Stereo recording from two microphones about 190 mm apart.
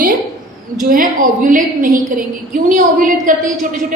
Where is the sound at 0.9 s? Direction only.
45° right (ahead or behind).